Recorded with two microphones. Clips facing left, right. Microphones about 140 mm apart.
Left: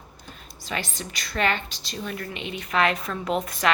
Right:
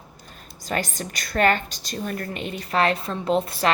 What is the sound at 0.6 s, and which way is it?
A woman's voice, 45° right (ahead or behind).